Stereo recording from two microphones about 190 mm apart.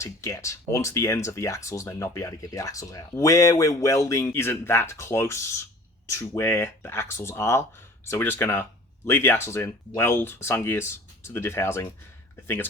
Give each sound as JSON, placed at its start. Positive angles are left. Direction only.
{"t": 0.0, "sound": "speech", "side_deg": 15}